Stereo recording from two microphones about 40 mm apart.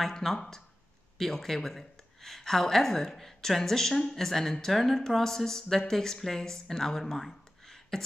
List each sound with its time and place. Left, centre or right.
0.1 s speech: centre